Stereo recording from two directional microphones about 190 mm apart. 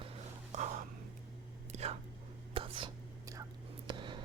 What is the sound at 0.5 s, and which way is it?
Whispering, 40° right (ahead or behind).